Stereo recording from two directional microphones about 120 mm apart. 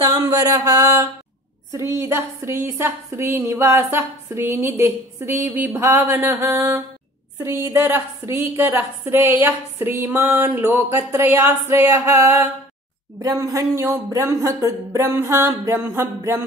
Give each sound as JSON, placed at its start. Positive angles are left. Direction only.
{"t": 0.0, "sound": "a woman's voice", "side_deg": -30}